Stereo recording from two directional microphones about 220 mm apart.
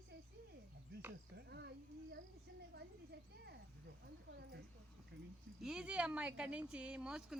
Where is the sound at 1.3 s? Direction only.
50° right (ahead or behind).